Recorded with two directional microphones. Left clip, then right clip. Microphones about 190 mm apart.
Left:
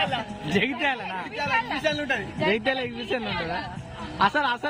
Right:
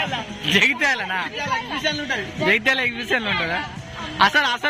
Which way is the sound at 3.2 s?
25° right (ahead or behind).